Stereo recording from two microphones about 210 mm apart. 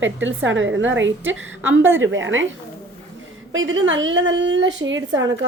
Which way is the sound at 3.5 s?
65° right (ahead or behind).